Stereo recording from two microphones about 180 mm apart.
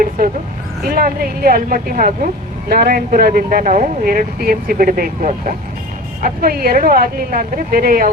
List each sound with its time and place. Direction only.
0.9 s a woman's voice: 55° right (ahead or behind)